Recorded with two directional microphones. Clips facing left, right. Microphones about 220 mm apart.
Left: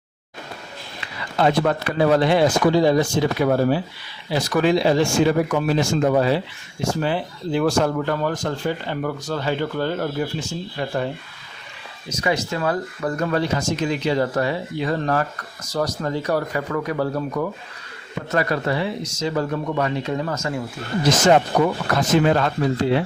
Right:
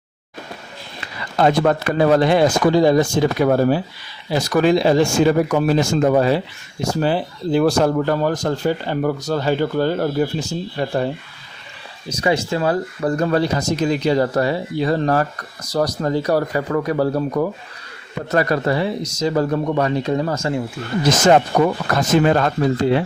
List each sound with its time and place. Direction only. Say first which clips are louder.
1.0 s speech: right 3 dB; 45° right (ahead or behind)
21.2 s speech: right 3 dB; 45° right (ahead or behind)